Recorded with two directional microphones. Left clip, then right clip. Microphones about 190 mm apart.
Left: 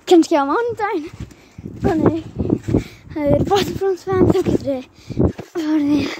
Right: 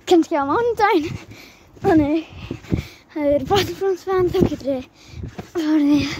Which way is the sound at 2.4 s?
40° right (ahead or behind).